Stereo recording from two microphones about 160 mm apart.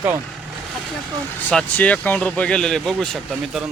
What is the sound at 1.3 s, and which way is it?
Speech, 10° left (ahead or behind).